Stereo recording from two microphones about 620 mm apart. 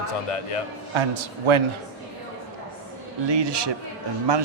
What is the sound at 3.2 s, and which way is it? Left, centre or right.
Speech, right.